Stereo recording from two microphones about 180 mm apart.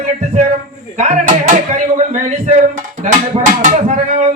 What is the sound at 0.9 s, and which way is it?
Speech, 45° right (ahead or behind).